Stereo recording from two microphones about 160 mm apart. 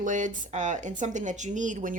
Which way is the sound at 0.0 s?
55° right (ahead or behind).